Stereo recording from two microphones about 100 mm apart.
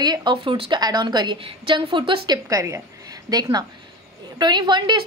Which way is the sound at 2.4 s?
35° right (ahead or behind).